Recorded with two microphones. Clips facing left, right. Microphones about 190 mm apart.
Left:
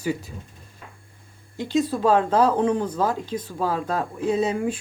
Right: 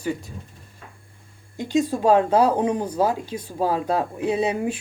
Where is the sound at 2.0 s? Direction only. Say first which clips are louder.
Right 2 dB; 15° right (ahead or behind).